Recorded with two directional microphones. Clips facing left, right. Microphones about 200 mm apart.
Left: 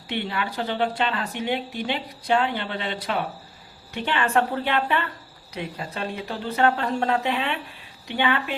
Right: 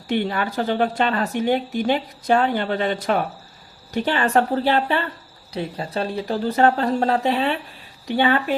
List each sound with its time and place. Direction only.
0.1 s speech: 45° right (ahead or behind)